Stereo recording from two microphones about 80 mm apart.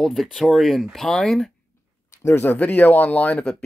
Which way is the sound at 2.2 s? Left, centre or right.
Left.